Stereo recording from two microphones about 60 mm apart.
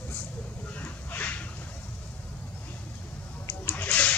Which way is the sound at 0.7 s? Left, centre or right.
Left.